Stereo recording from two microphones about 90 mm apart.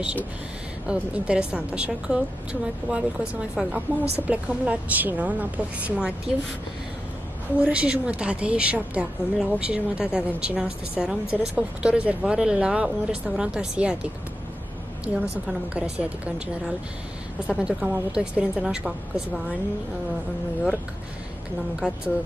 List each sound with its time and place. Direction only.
0.0 s a woman's voice: 20° right (ahead or behind)
7.5 s a woman's voice: 15° right (ahead or behind)
15.7 s a woman's voice: 15° right (ahead or behind)
21.7 s a woman's voice: 10° right (ahead or behind)